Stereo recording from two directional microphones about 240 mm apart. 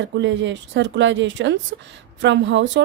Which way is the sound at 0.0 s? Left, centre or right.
Right.